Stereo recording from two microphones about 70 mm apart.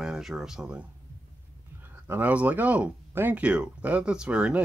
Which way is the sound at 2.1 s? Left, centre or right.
Right.